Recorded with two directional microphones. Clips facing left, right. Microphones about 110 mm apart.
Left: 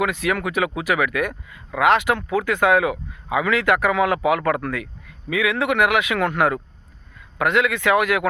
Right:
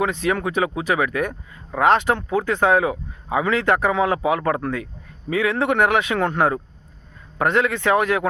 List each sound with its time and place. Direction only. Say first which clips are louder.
0.0 s speech: right 1 dB; 25° right (ahead or behind)